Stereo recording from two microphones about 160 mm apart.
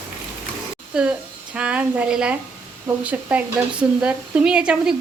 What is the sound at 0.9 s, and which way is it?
A woman's voice, 5° right (ahead or behind).